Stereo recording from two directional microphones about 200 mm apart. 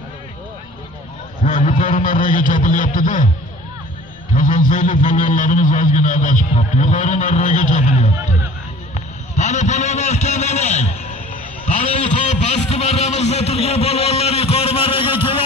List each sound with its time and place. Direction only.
1.4 s a man's voice: 40° left (ahead or behind)
4.3 s a man's voice: 40° left (ahead or behind)
9.4 s a man's voice: 35° left (ahead or behind)
12.3 s a sound: 35° left (ahead or behind)